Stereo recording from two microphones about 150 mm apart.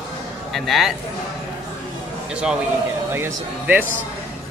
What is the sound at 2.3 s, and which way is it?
A man's voice, 5° right (ahead or behind).